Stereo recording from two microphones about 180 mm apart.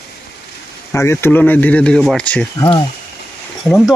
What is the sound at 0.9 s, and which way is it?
Speech, 15° left (ahead or behind).